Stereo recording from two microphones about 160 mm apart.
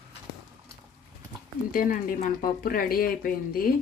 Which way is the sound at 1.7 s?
60° left (ahead or behind).